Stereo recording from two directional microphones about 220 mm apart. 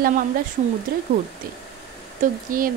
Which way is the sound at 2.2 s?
35° right (ahead or behind).